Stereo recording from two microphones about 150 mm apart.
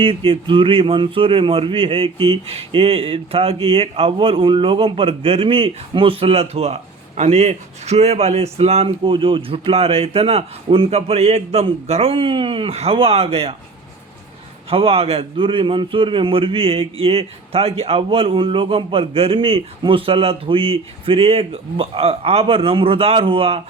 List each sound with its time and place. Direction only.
0.0 s a man's voice: 35° right (ahead or behind)
14.7 s a man's voice: 40° right (ahead or behind)